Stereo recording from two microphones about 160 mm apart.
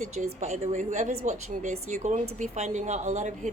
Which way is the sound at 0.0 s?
45° right (ahead or behind).